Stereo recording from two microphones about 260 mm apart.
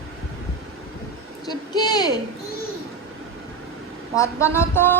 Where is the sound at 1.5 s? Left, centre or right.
Centre.